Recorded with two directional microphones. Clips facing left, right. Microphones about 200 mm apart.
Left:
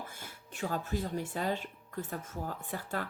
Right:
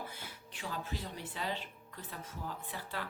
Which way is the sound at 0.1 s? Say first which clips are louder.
Even; 45° left (ahead or behind).